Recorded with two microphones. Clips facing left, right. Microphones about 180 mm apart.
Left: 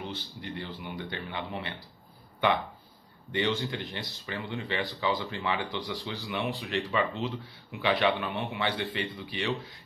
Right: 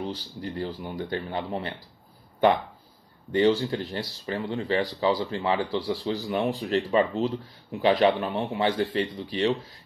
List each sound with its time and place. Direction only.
0.0 s speech: 40° right (ahead or behind)
3.3 s speech: 35° right (ahead or behind)